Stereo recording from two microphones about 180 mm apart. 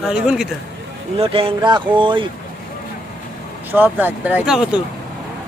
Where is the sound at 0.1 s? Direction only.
5° right (ahead or behind).